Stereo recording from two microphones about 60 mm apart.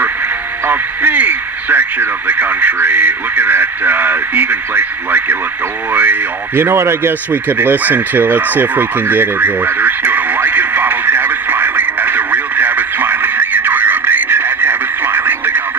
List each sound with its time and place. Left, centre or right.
0.7 s speech: right
7.4 s crow: right